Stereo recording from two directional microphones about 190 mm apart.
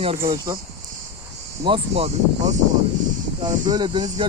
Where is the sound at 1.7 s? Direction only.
30° right (ahead or behind).